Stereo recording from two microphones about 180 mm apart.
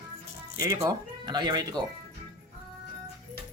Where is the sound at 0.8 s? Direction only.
25° right (ahead or behind).